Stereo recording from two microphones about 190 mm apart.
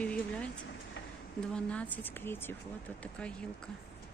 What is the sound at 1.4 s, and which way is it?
Speech, 5° left (ahead or behind).